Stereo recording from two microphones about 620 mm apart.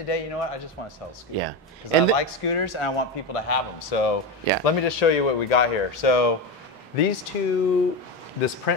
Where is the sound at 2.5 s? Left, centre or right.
Left.